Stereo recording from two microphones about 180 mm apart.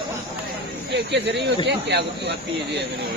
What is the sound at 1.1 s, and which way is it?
Speech, 75° right (ahead or behind).